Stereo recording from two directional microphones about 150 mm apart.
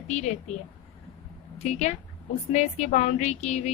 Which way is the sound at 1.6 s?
50° left (ahead or behind).